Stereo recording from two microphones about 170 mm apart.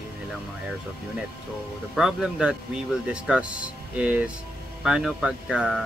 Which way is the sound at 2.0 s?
5° right (ahead or behind).